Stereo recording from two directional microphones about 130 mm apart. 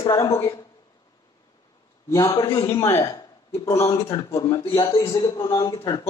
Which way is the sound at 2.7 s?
20° left (ahead or behind).